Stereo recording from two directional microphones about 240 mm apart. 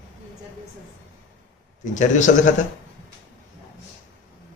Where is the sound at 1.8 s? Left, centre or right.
Left.